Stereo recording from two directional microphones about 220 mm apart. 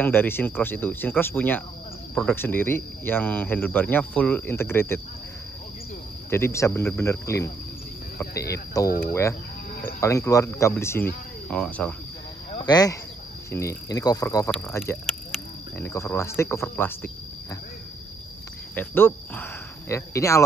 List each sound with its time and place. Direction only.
0.0 s speech: 10° left (ahead or behind)
6.3 s speech: 10° left (ahead or behind)
8.8 s speech: 15° left (ahead or behind)
12.5 s speech: 20° left (ahead or behind)
15.0 s a sound: centre (ahead or behind)
15.9 s speech: 10° left (ahead or behind)
18.8 s speech: 10° left (ahead or behind)